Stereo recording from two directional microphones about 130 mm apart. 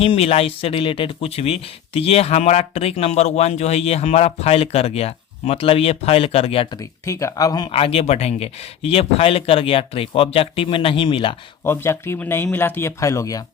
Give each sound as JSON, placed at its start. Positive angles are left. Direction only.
{"t": 0.0, "sound": "speech", "side_deg": 50}
{"t": 6.7, "sound": "speech", "side_deg": 25}
{"t": 7.7, "sound": "speech", "side_deg": 45}
{"t": 11.6, "sound": "speech", "side_deg": 20}